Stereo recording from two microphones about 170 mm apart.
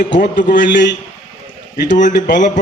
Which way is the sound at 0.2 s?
50° left (ahead or behind).